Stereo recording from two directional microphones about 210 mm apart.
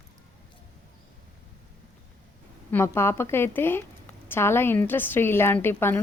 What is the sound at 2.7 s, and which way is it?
A woman's voice, 10° left (ahead or behind).